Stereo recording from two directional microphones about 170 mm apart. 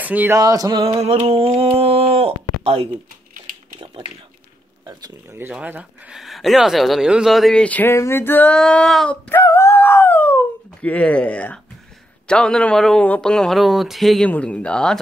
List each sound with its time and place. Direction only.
0.0 s male singing: 10° right (ahead or behind)
0.4 s speech: 20° right (ahead or behind)
0.9 s speech: 35° right (ahead or behind)
4.8 s speech: 20° right (ahead or behind)
5.5 s speech: 5° right (ahead or behind)
9.4 s a sound: 15° left (ahead or behind)
12.3 s speech: 5° left (ahead or behind)